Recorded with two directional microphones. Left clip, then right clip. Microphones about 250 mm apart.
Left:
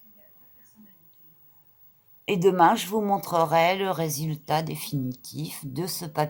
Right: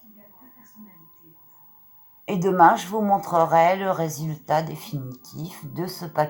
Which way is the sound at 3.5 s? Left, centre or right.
Left.